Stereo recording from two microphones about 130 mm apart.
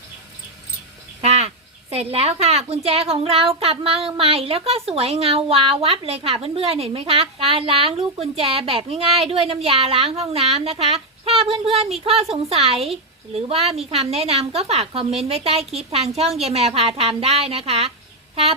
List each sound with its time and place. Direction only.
1.2 s speech: 55° right (ahead or behind)